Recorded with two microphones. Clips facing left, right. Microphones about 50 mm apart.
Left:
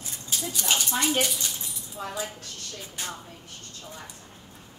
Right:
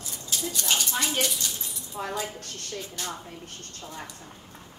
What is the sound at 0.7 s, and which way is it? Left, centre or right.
Speech, centre.